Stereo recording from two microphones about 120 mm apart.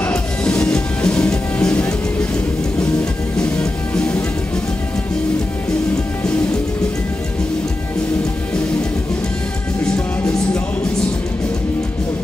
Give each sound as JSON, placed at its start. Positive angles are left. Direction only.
{"t": 0.0, "sound": "music", "side_deg": 10}
{"t": 3.3, "sound": "music", "side_deg": 10}
{"t": 9.9, "sound": "music", "side_deg": 10}